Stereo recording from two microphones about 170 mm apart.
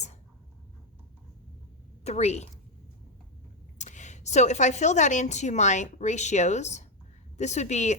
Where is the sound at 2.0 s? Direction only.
40° left (ahead or behind).